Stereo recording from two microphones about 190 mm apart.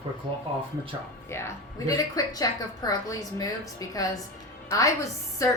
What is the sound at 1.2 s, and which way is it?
A woman's voice, 15° left (ahead or behind).